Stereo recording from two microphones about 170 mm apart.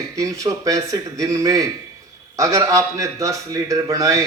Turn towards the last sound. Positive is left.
turn(degrees=-20)  # may be behind; listen again after turning